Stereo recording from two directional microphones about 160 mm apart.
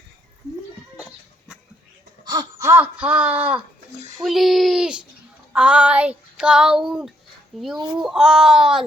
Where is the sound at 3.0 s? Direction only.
10° right (ahead or behind).